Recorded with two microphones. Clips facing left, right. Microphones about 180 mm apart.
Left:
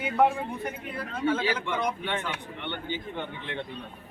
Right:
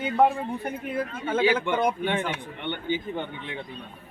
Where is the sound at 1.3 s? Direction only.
55° right (ahead or behind).